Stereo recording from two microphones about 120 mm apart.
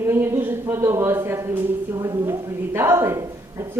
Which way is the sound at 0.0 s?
20° right (ahead or behind).